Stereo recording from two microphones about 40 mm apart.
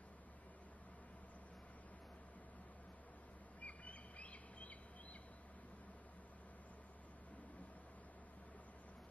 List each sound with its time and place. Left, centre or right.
3.6 s bird: left